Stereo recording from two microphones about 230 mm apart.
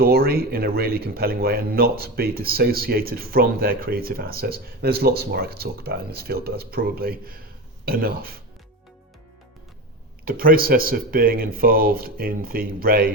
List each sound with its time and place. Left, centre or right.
0.0 s speech: right
10.2 s speech: right